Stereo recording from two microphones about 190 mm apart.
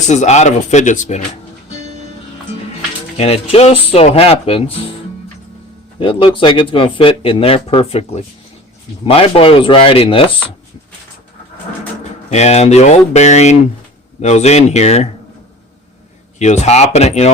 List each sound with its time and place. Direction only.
0.1 s speech: 35° left (ahead or behind)
3.2 s speech: 30° left (ahead or behind)
6.0 s speech: 25° left (ahead or behind)
12.3 s speech: 35° left (ahead or behind)
16.4 s speech: 35° left (ahead or behind)